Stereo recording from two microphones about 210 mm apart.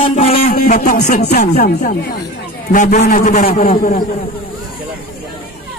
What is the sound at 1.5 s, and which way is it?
Speech, 50° left (ahead or behind).